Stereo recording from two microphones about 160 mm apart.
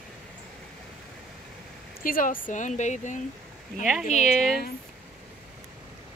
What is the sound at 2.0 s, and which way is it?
Speech, 60° left (ahead or behind).